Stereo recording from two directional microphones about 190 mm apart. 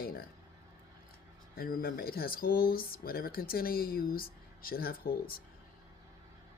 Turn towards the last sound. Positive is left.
turn(degrees=50)  # may be behind; listen again after turning